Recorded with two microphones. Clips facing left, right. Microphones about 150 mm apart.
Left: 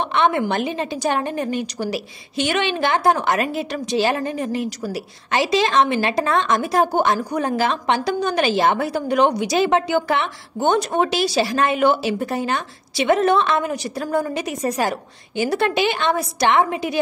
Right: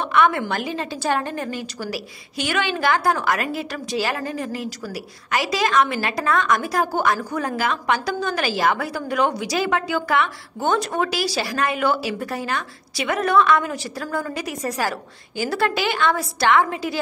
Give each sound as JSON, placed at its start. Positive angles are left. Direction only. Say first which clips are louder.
{"t": 0.1, "sound": "a woman's voice", "louder": "right 1 dB", "side_deg": 20}